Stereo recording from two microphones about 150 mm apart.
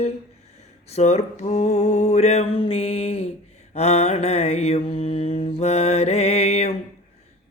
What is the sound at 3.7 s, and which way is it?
Mantra, 45° left (ahead or behind).